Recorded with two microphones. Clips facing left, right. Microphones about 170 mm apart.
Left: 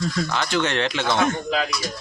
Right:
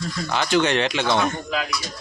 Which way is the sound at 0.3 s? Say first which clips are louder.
Right 6 dB; 15° right (ahead or behind).